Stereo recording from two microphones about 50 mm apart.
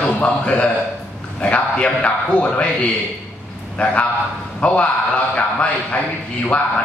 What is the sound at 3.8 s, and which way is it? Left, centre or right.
A man's voice, left.